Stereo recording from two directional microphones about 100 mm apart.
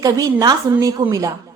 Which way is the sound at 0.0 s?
35° right (ahead or behind).